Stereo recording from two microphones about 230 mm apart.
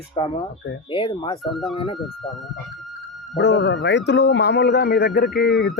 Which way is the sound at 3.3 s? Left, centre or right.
Left.